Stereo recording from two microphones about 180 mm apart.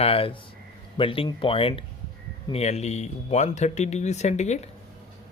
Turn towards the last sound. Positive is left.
turn(degrees=40)  # may be behind; listen again after turning